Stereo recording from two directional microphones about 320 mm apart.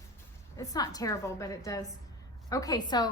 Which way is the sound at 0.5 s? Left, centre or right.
Centre.